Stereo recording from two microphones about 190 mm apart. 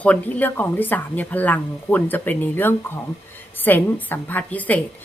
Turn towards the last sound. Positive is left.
turn(degrees=10)  # may be behind; listen again after turning